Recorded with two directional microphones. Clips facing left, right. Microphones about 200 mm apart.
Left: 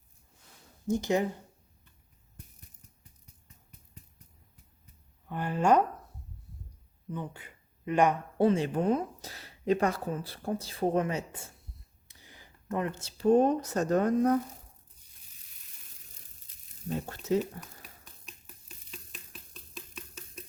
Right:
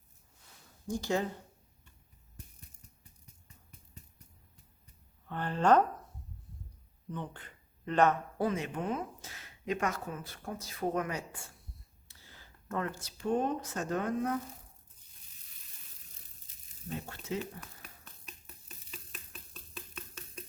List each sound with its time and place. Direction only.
0.9 s speech: 20° left (ahead or behind)
5.3 s a sound: 10° left (ahead or behind)
7.1 s speech: 10° left (ahead or behind)
8.4 s speech: 30° left (ahead or behind)
17.1 s speech: 40° left (ahead or behind)
18.3 s a sound: centre (ahead or behind)